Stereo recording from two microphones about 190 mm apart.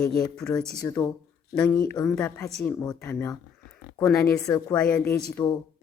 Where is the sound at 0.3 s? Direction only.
5° left (ahead or behind).